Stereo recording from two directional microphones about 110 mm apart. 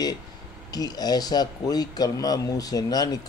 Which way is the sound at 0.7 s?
35° left (ahead or behind).